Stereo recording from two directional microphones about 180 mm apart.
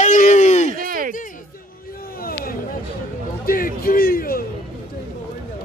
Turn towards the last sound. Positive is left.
turn(degrees=55)  # may be behind; listen again after turning